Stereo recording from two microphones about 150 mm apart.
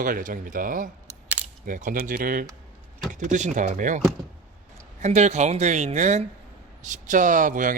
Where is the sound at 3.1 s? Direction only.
55° right (ahead or behind).